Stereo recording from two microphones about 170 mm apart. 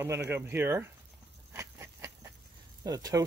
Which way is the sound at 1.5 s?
15° right (ahead or behind).